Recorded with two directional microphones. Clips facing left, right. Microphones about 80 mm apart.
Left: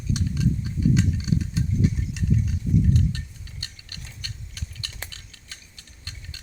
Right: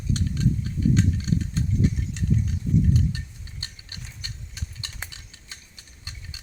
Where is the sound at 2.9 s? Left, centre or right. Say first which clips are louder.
Even; centre.